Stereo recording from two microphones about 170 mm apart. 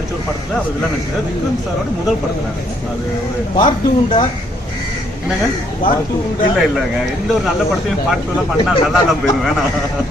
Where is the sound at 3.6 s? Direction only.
30° left (ahead or behind).